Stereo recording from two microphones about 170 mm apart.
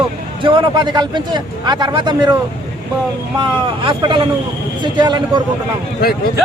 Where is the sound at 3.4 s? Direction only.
30° right (ahead or behind).